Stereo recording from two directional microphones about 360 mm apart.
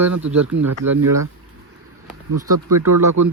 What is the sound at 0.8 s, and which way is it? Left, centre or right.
Speech, right.